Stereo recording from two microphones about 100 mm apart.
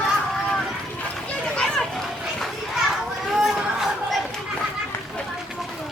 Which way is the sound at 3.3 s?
5° right (ahead or behind).